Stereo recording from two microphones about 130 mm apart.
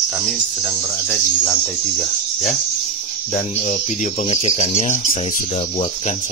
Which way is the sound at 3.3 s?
65° left (ahead or behind).